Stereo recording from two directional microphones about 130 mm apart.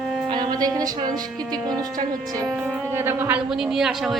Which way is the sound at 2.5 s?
Centre (ahead or behind).